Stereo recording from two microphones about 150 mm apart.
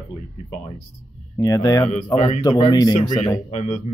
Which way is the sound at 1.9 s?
50° left (ahead or behind).